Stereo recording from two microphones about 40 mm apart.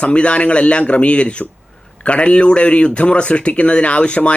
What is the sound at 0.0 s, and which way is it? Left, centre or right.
Speech, left.